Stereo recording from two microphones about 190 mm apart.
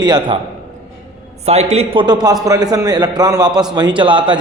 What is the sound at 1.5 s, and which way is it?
A man's voice, 35° right (ahead or behind).